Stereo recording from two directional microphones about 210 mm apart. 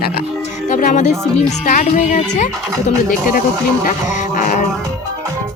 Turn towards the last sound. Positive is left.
turn(degrees=40)  # may be behind; listen again after turning